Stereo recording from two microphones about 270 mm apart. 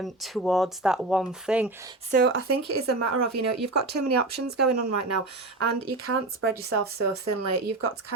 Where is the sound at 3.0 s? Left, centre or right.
Right.